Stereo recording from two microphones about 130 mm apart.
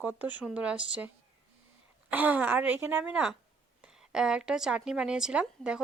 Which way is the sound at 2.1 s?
10° right (ahead or behind).